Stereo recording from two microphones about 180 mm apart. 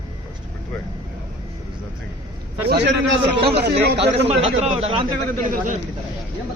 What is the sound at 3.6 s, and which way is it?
Speech, 65° right (ahead or behind).